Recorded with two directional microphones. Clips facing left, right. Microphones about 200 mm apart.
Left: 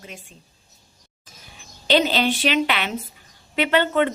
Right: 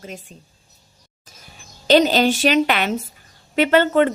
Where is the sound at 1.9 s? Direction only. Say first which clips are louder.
Right 5 dB; 45° right (ahead or behind).